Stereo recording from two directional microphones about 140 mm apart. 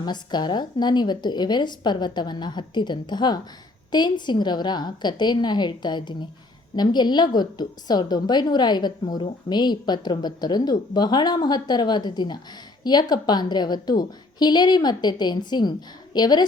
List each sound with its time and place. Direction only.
0.0 s a woman's voice: 30° left (ahead or behind)